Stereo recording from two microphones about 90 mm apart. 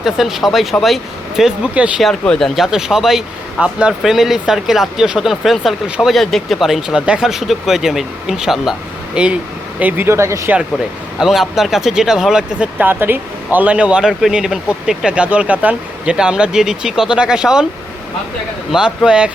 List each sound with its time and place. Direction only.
0.0 s a man's voice: centre (ahead or behind)
2.0 s a man's voice: 5° left (ahead or behind); by 9.4 s 10° right (ahead or behind)
9.8 s speech: 25° right (ahead or behind)
11.2 s speech: 5° right (ahead or behind)
12.8 s a man's voice: 25° right (ahead or behind)
18.7 s a man's voice: 10° right (ahead or behind)